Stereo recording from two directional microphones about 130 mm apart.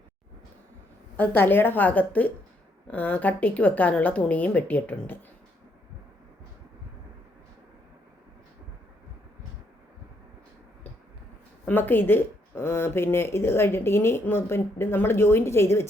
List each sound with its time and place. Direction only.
1.1 s a woman's voice: 15° left (ahead or behind)
11.6 s speech: 15° left (ahead or behind)